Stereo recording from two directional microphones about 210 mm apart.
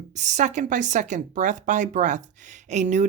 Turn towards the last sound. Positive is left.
turn(degrees=-35)  # may be behind; listen again after turning